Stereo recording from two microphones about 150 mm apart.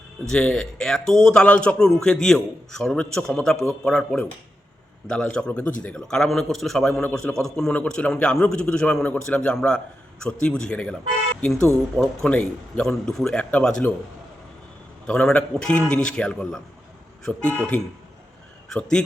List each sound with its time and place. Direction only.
0.3 s a man's voice: 5° left (ahead or behind)
15.0 s a man's voice: 5° left (ahead or behind)